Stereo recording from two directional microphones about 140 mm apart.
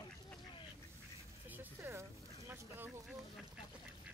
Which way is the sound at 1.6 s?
15° right (ahead or behind).